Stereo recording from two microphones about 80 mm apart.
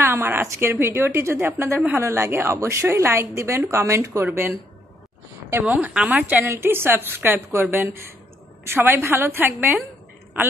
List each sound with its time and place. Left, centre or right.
0.0 s a woman's voice: right
4.2 s a woman's voice: right
5.5 s a woman's voice: right